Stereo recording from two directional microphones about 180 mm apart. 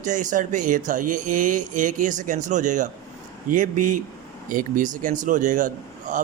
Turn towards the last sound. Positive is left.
turn(degrees=-45)  # may be behind; listen again after turning